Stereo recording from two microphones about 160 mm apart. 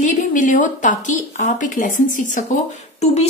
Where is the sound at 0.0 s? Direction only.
50° left (ahead or behind).